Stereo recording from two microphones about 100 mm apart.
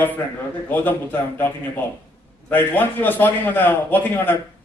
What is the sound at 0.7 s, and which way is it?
A man's voice, 20° left (ahead or behind).